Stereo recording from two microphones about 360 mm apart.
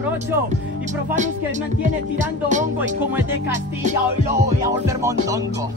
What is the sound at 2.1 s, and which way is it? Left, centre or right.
Speech, right.